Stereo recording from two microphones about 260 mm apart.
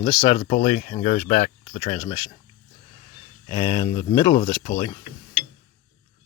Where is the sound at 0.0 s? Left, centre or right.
Centre.